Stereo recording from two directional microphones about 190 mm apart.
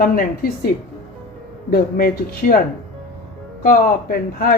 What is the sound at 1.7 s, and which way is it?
Speech, 50° left (ahead or behind).